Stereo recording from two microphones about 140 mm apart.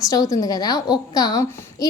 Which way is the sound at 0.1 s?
25° left (ahead or behind).